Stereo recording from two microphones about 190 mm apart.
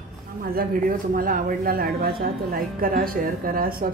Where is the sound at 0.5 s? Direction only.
50° right (ahead or behind).